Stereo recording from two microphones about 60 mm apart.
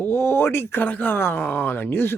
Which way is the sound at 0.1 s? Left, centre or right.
Left.